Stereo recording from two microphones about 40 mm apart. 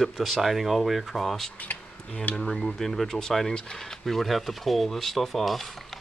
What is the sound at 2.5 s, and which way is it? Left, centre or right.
Speech, centre.